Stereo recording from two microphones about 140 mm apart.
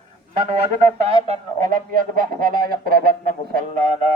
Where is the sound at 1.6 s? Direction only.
75° right (ahead or behind).